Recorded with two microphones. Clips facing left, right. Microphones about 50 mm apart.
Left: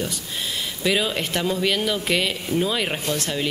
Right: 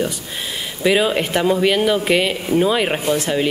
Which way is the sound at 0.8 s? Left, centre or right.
Centre.